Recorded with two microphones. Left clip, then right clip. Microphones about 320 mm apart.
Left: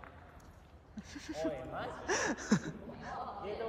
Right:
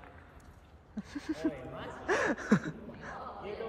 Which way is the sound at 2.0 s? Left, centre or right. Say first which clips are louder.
Right 5 dB; centre.